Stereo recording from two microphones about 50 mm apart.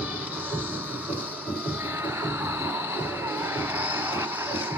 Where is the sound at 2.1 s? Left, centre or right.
Right.